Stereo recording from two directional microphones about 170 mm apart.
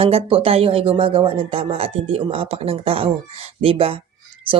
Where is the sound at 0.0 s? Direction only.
35° right (ahead or behind).